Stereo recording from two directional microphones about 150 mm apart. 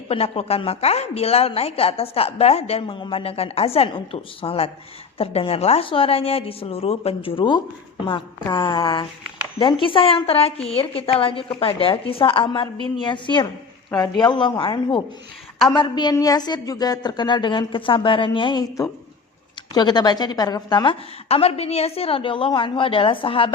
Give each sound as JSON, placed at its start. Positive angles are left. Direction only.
{"t": 0.1, "sound": "a woman's voice", "side_deg": 40}
{"t": 21.2, "sound": "a woman's voice", "side_deg": 40}